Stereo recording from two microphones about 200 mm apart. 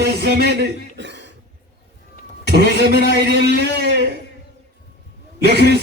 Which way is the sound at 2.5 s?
55° right (ahead or behind).